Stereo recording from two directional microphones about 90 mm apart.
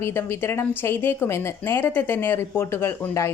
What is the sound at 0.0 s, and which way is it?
A woman's voice, 30° left (ahead or behind).